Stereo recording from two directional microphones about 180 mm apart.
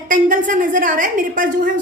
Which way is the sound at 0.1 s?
45° right (ahead or behind).